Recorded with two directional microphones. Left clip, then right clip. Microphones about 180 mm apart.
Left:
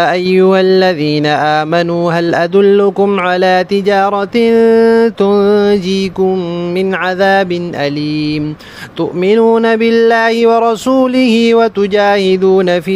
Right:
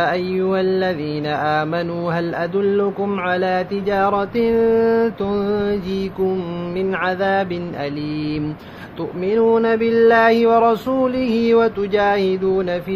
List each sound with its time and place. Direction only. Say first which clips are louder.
0.0 s mantra: left 9 dB; 65° left (ahead or behind)
6.8 s mantra: left 7 dB; 55° left (ahead or behind)
9.2 s mantra: left 6 dB; 65° left (ahead or behind)